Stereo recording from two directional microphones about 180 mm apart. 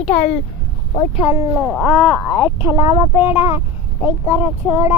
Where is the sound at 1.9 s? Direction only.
25° left (ahead or behind).